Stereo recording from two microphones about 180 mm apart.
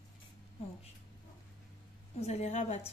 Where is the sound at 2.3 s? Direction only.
40° left (ahead or behind).